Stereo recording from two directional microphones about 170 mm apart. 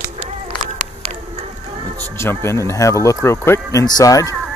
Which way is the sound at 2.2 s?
15° left (ahead or behind).